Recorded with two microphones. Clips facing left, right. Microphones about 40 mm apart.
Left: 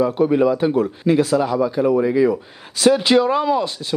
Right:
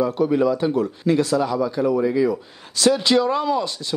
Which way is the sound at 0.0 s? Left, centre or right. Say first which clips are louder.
Left 3 dB; left.